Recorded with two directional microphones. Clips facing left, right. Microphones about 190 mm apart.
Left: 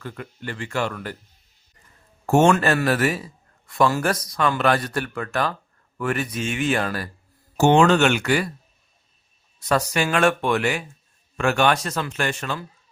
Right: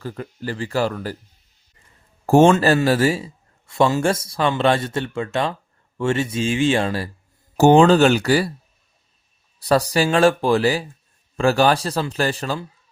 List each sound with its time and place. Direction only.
0.0 s speech: 35° right (ahead or behind)
2.2 s a man's voice: 30° right (ahead or behind)
9.6 s speech: 35° right (ahead or behind)